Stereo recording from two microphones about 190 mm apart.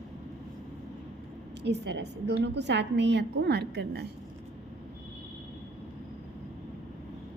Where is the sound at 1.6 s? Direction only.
65° right (ahead or behind).